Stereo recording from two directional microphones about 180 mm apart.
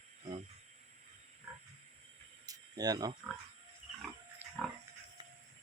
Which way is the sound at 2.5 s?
20° right (ahead or behind).